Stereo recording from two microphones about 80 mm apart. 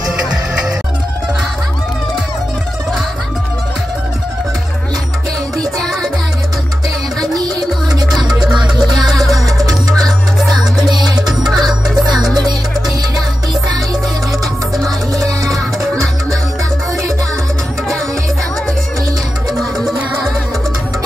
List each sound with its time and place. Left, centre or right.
0.3 s music: centre
7.2 s music: right
8.5 s music: right
9.0 s music: centre
10.9 s music: right
11.2 s music: centre
11.6 s music: right
14.9 s music: right
19.5 s music: centre